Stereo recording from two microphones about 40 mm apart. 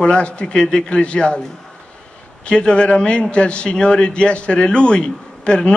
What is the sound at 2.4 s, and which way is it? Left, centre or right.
A man's voice, left.